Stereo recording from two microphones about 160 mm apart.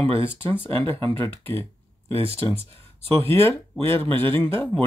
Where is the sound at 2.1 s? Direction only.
35° right (ahead or behind).